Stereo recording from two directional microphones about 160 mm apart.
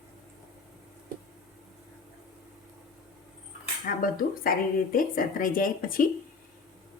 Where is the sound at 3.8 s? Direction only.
65° left (ahead or behind).